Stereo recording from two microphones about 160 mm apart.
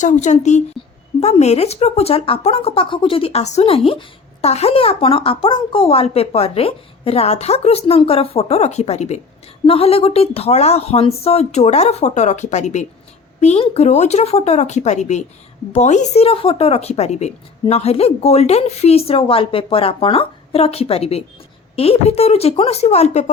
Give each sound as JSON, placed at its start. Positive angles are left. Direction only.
{"t": 0.0, "sound": "speech", "side_deg": 50}